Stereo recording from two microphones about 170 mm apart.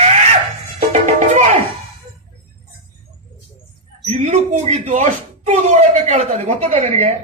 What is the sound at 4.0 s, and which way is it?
Speech, 40° right (ahead or behind).